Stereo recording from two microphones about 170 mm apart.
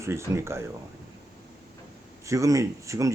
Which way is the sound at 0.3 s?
15° right (ahead or behind).